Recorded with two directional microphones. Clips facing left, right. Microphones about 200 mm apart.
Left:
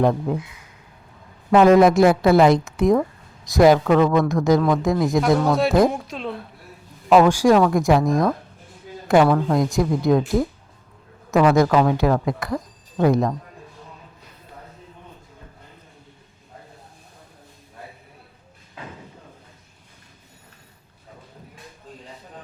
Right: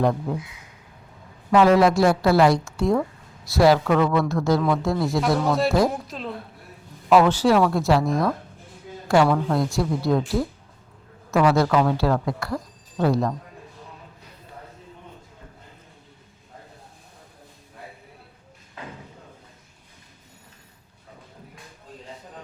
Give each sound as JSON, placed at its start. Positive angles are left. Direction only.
{"t": 0.0, "sound": "a woman's voice", "side_deg": 20}
{"t": 1.5, "sound": "a woman's voice", "side_deg": 20}
{"t": 5.4, "sound": "a woman's voice", "side_deg": 0}
{"t": 7.1, "sound": "a woman's voice", "side_deg": 15}